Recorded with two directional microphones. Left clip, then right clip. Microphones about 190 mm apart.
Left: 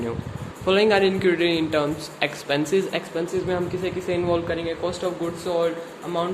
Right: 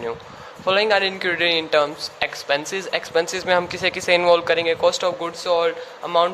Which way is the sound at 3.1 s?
40° right (ahead or behind).